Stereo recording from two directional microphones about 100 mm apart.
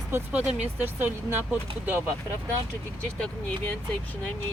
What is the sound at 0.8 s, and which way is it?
Speech, 20° right (ahead or behind).